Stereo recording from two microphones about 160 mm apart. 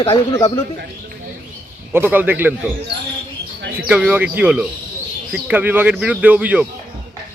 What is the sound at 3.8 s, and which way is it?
Speech, 5° right (ahead or behind).